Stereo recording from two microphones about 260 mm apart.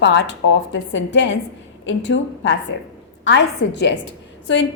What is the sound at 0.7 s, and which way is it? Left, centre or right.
A woman's voice, left.